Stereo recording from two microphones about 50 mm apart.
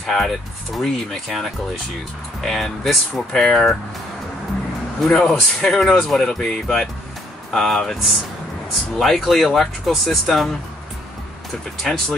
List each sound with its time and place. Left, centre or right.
0.0 s speech: centre
5.0 s speech: centre
11.8 s speech: centre